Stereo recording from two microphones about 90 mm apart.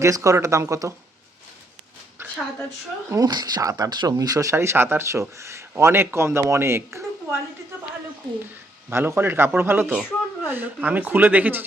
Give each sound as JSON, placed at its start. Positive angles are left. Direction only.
{"t": 0.0, "sound": "speech", "side_deg": -35}
{"t": 3.2, "sound": "speech", "side_deg": -50}
{"t": 8.9, "sound": "speech", "side_deg": -25}